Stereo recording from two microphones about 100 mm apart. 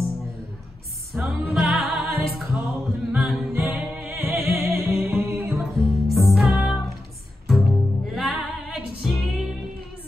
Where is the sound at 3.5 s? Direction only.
20° right (ahead or behind).